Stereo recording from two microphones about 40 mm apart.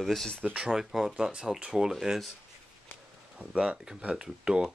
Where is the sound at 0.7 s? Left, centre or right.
Centre.